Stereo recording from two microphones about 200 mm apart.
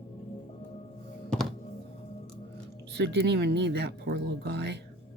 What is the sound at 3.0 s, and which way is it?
Speech, 55° right (ahead or behind).